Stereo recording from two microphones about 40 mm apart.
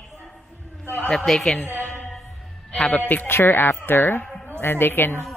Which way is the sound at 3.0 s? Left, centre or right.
Left.